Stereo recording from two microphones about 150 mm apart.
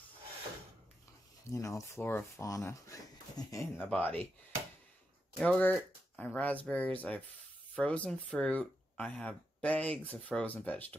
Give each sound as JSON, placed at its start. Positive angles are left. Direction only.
{"t": 1.5, "sound": "speech", "side_deg": 20}
{"t": 3.7, "sound": "speech", "side_deg": 10}
{"t": 5.4, "sound": "speech", "side_deg": 10}